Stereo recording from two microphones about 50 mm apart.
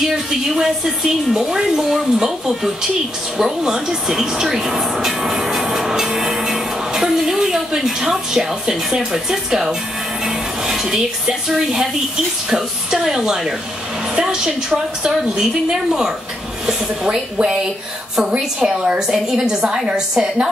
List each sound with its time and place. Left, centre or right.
0.0 s a woman's voice: centre
18.6 s a woman's voice: centre